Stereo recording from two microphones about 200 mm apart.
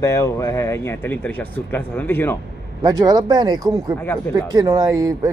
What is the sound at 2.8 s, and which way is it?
Speech, 15° right (ahead or behind).